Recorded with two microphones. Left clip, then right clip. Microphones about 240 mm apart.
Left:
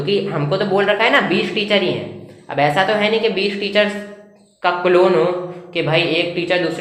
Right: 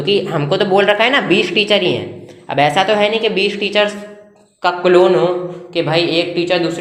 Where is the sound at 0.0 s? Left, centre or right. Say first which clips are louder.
Right 3 dB; right.